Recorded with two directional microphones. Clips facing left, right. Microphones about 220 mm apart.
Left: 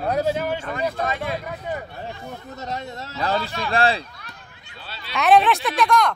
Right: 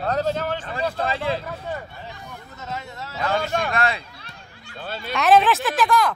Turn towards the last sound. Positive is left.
turn(degrees=-5)  # may be behind; listen again after turning